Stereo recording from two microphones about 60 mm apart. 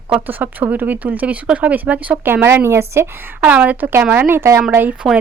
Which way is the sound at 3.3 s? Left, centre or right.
Right.